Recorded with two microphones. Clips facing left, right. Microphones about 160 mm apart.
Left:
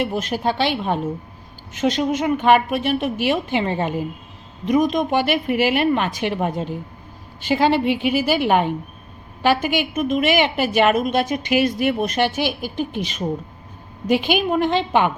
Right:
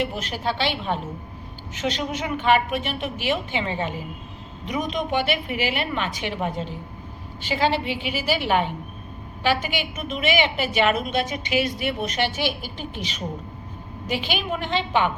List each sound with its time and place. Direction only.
0.1 s a woman's voice: 45° left (ahead or behind)